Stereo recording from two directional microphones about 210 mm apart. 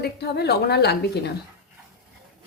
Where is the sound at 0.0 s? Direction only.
50° left (ahead or behind).